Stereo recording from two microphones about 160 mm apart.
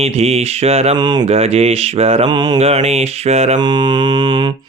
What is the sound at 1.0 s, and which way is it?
Mantra, 25° right (ahead or behind).